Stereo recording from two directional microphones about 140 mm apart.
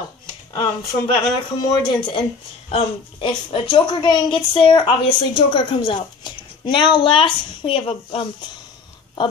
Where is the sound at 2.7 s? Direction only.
40° left (ahead or behind).